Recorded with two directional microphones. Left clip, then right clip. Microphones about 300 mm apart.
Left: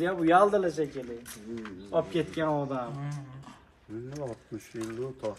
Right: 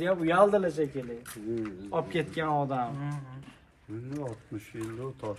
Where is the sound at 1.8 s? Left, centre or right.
Right.